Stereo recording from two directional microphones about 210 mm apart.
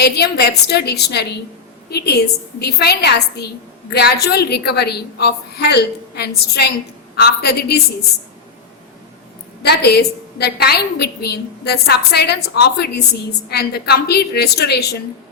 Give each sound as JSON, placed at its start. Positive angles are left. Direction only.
{"t": 0.0, "sound": "a woman's voice", "side_deg": 50}
{"t": 9.6, "sound": "a woman's voice", "side_deg": 50}